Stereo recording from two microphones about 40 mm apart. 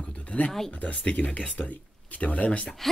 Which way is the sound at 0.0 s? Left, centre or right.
Left.